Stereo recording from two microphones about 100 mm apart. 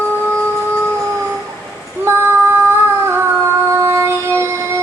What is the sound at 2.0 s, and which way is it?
Female singing, 25° right (ahead or behind).